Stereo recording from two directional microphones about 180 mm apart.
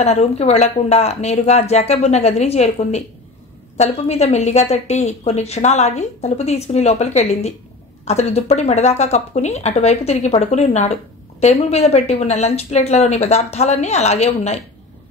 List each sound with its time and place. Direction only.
0.0 s a woman's voice: 35° left (ahead or behind)